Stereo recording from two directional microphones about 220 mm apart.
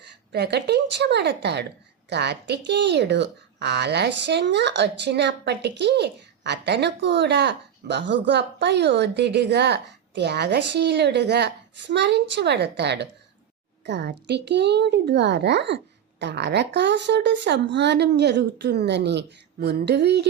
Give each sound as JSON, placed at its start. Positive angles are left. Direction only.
{"t": 0.3, "sound": "speech", "side_deg": -45}